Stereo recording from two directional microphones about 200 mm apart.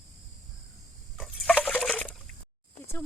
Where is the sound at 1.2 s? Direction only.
5° left (ahead or behind).